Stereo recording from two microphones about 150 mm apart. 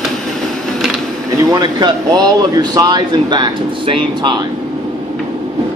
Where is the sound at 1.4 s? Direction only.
25° right (ahead or behind).